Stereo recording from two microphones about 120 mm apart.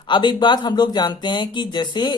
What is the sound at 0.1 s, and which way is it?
Speech, 40° left (ahead or behind).